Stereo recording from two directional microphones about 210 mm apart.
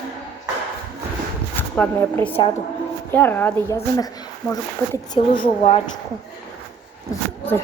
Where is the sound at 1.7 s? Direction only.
10° left (ahead or behind).